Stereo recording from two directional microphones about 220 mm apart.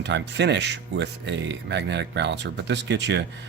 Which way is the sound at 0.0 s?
50° right (ahead or behind).